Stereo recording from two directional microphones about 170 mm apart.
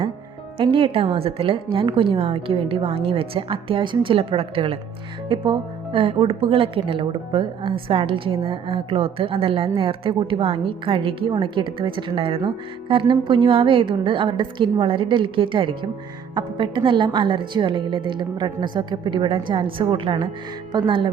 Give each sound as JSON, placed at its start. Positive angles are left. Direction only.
{"t": 0.6, "sound": "a woman's voice", "side_deg": -30}